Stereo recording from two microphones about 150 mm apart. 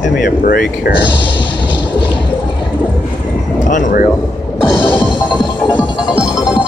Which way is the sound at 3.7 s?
60° left (ahead or behind).